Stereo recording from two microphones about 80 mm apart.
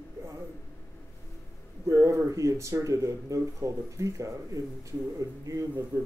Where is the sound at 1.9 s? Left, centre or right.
Right.